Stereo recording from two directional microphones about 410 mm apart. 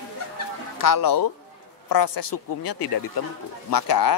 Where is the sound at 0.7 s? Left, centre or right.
Left.